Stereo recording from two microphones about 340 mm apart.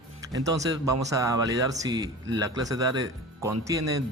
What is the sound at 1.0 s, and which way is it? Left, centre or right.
Speech, centre.